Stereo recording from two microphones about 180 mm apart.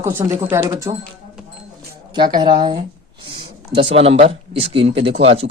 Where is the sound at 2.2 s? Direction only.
25° right (ahead or behind).